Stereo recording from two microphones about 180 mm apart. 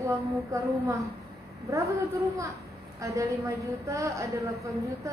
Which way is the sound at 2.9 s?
15° right (ahead or behind).